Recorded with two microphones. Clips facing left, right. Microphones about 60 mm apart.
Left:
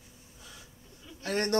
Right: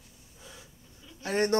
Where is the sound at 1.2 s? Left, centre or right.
Centre.